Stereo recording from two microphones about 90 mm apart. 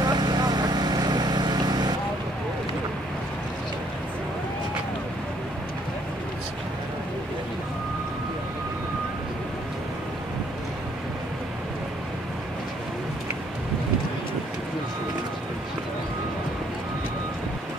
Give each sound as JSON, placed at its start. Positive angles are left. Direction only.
{"t": 0.0, "sound": "vehicle", "side_deg": -50}